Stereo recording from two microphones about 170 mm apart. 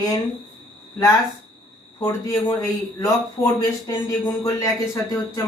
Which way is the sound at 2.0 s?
15° left (ahead or behind).